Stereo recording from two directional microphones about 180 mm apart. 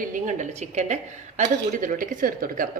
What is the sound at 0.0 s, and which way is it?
A woman's voice, 45° right (ahead or behind).